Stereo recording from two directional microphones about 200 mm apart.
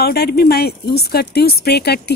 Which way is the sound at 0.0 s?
50° left (ahead or behind).